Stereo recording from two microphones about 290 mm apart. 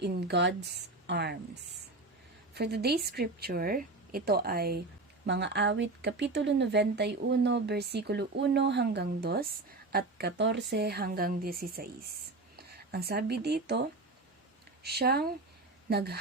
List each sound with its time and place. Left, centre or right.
0.0 s speech: right
2.6 s speech: right
14.8 s speech: right